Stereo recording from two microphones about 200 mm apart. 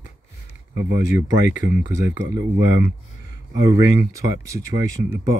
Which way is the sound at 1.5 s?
40° left (ahead or behind).